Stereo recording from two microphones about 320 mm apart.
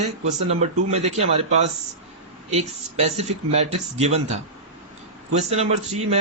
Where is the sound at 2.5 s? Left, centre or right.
Centre.